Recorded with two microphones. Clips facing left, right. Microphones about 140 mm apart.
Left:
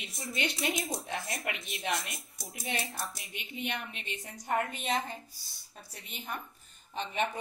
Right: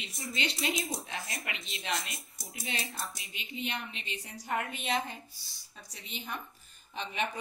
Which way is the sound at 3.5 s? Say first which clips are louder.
Even; 55° left (ahead or behind).